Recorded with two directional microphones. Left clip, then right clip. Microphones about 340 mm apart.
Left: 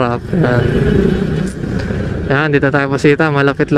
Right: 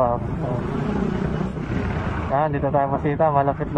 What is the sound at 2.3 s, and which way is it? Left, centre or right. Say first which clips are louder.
Speech: left 7 dB; left.